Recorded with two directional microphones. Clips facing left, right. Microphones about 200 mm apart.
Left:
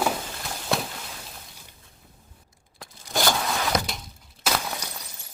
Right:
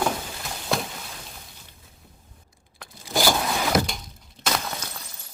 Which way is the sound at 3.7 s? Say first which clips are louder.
Right 4 dB; centre (ahead or behind).